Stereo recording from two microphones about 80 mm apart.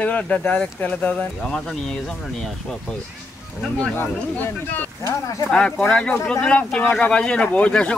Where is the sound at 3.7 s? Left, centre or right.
Left.